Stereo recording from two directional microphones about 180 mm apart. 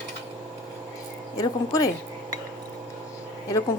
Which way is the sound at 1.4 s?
20° left (ahead or behind).